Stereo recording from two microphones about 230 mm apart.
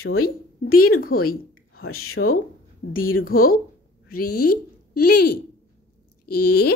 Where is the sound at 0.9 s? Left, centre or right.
Left.